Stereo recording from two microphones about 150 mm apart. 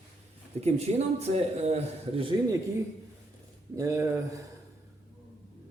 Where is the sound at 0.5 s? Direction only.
45° right (ahead or behind).